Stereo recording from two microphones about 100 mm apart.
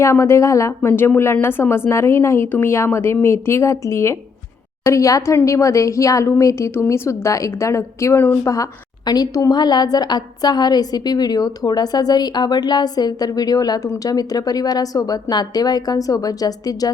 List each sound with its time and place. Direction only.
0.0 s a woman's voice: 30° left (ahead or behind)
8.4 s a woman's voice: 35° left (ahead or behind)